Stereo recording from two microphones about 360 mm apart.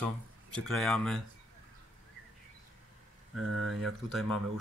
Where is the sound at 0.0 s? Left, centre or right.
Centre.